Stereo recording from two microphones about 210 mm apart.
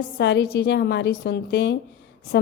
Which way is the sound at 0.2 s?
55° left (ahead or behind).